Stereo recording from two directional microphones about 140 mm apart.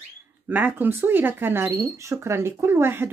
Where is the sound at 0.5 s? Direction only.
15° right (ahead or behind).